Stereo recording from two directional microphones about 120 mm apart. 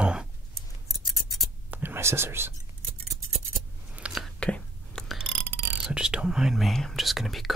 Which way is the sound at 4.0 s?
10° right (ahead or behind).